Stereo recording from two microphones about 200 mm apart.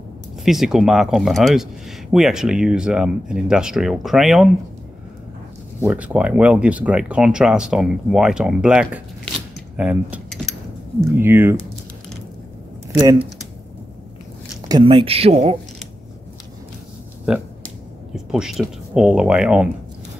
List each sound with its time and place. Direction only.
0.5 s speech: centre (ahead or behind)
5.8 s speech: 10° right (ahead or behind)
9.8 s cutlery: 5° right (ahead or behind)
11.1 s speech: 10° right (ahead or behind)
12.9 s speech: 10° right (ahead or behind)
14.7 s speech: 25° right (ahead or behind)
18.1 s speech: centre (ahead or behind)